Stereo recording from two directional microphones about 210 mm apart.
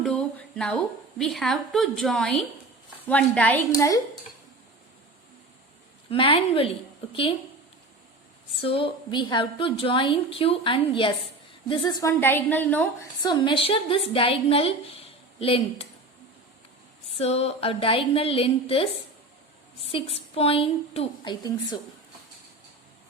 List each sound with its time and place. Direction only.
0.0 s a sound: 5° left (ahead or behind)
1.2 s a woman's voice: centre (ahead or behind)
6.1 s a woman's voice: 25° left (ahead or behind)
8.6 s a woman's voice: 25° left (ahead or behind); by 13.1 s 10° left (ahead or behind)
13.2 s a woman's voice: 20° left (ahead or behind)
17.2 s a woman's voice: 30° left (ahead or behind)